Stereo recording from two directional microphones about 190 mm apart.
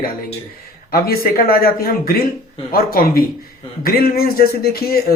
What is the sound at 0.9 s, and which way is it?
Speech, 50° left (ahead or behind).